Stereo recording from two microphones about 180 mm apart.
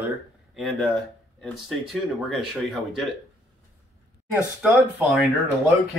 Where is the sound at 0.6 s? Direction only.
Centre (ahead or behind).